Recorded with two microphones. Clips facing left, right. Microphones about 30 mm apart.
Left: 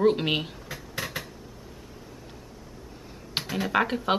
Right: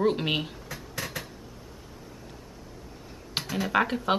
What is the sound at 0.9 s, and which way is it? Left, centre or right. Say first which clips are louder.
Dishes: left 2 dB; centre.